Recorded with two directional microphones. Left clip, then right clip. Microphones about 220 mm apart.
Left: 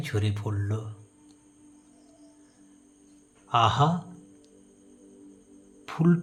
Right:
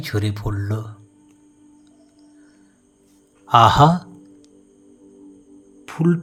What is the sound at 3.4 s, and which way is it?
Speech, 30° right (ahead or behind).